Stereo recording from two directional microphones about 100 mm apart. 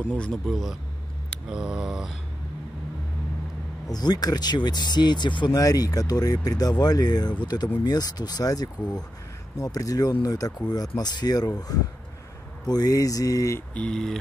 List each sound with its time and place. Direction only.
0.2 s a sound: 5° left (ahead or behind)
3.9 s speech: 40° left (ahead or behind)
13.7 s speech: 10° left (ahead or behind)